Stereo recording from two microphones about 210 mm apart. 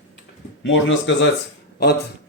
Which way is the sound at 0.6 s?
60° left (ahead or behind).